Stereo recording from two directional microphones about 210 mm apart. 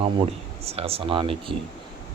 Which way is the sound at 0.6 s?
30° right (ahead or behind).